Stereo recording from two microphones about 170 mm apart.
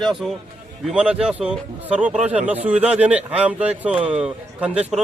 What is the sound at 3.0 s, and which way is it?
Speech, 10° right (ahead or behind).